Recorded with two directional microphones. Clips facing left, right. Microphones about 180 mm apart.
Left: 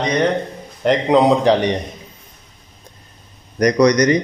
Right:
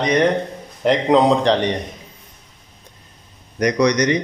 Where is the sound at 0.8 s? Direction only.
Centre (ahead or behind).